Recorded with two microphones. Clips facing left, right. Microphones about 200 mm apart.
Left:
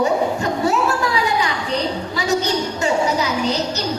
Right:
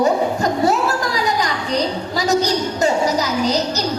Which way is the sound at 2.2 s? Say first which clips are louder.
Right 3 dB; 40° right (ahead or behind).